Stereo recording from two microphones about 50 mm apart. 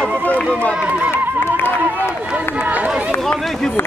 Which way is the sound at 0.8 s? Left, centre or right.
Right.